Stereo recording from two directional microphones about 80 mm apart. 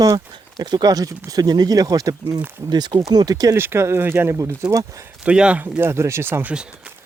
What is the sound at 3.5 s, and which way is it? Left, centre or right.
Speech, right.